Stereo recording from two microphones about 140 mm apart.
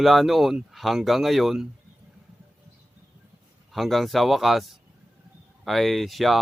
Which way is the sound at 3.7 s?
Centre (ahead or behind).